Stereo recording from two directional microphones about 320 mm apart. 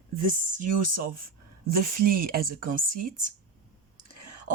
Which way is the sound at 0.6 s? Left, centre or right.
Right.